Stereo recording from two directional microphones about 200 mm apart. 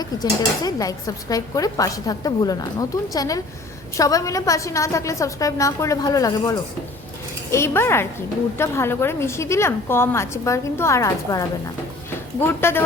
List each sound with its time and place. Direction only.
0.0 s a woman's voice: 20° left (ahead or behind)